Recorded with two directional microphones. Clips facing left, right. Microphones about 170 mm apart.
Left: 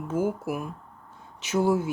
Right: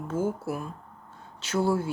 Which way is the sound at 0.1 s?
15° left (ahead or behind).